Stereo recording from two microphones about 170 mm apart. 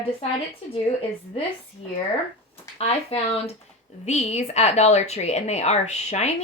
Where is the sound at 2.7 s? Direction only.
35° left (ahead or behind).